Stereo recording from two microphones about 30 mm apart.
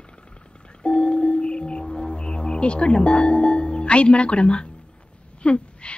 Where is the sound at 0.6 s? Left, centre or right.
Left.